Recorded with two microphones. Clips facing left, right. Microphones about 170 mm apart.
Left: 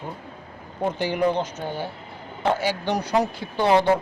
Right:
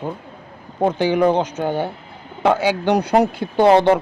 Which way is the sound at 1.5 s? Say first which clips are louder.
Right 8 dB; 60° right (ahead or behind).